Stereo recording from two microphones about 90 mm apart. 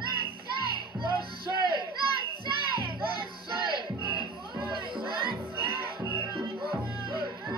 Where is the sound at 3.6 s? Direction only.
60° right (ahead or behind).